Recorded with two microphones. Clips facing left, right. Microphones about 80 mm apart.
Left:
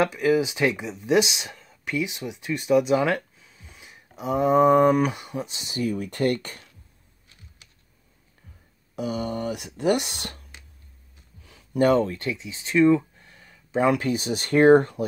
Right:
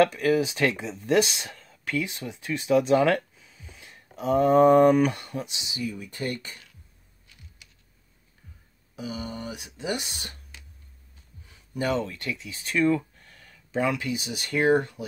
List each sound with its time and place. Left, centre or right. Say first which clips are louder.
0.0 s speech: even; centre
5.5 s speech: left 6 dB; left
8.9 s speech: left 6 dB; left
11.4 s a sound: left 7 dB; left
11.8 s speech: left 8 dB; left
12.2 s speech: left 4 dB; left
13.8 s speech: left 8 dB; left